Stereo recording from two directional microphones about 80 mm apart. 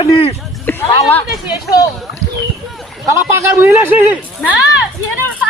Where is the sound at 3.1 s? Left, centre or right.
Right.